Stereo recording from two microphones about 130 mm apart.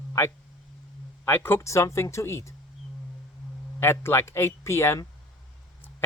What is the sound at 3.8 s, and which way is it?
Speech, 20° left (ahead or behind).